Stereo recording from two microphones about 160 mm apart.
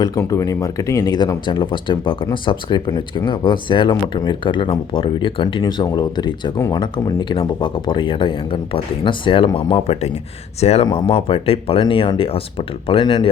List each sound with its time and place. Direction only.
0.0 s speech: 20° left (ahead or behind)